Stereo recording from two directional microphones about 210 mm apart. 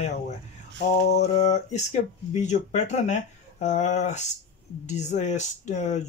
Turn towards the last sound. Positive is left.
turn(degrees=35)  # may be behind; listen again after turning